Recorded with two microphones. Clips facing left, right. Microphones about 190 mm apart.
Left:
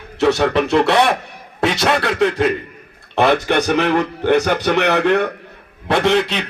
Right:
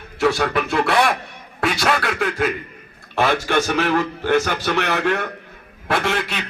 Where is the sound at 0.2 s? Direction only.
20° left (ahead or behind).